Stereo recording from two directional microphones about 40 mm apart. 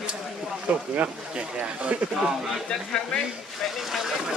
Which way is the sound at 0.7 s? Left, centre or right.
Right.